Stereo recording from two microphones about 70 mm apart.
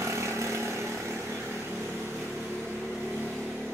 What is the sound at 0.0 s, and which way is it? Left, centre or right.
Vehicle, right.